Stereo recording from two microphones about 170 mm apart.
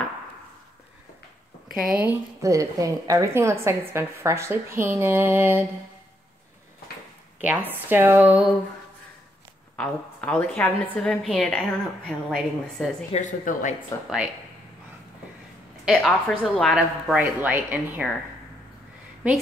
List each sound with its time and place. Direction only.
1.9 s a woman's voice: 10° right (ahead or behind)
7.3 s a woman's voice: 10° right (ahead or behind)
9.8 s a woman's voice: 5° left (ahead or behind)
13.1 s speech: 50° left (ahead or behind)
15.8 s a woman's voice: centre (ahead or behind)